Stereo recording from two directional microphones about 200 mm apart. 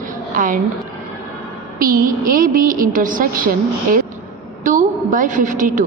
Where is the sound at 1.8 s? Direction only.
45° right (ahead or behind).